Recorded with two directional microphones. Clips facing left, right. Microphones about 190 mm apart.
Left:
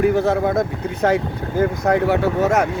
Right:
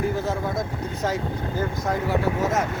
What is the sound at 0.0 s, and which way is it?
Speech, 65° left (ahead or behind).